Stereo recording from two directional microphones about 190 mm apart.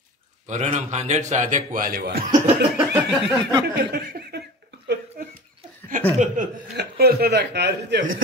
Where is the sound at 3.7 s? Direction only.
55° right (ahead or behind).